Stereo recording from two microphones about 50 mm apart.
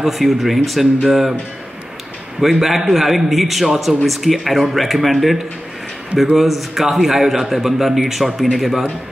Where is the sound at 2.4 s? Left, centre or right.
Centre.